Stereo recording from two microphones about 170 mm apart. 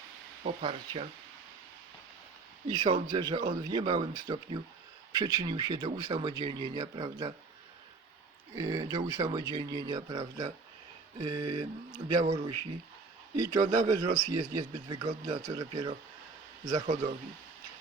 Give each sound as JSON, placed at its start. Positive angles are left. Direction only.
{"t": 0.4, "sound": "speech", "side_deg": -35}
{"t": 2.6, "sound": "speech", "side_deg": -30}
{"t": 3.4, "sound": "speech", "side_deg": -35}
{"t": 8.5, "sound": "speech", "side_deg": -20}
{"t": 13.3, "sound": "speech", "side_deg": -20}